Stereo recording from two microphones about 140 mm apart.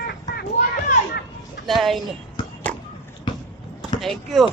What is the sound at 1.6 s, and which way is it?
Speech, centre (ahead or behind).